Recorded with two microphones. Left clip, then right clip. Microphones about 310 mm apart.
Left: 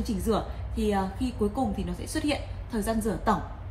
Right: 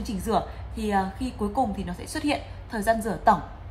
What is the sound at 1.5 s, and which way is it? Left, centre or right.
A woman's voice, centre.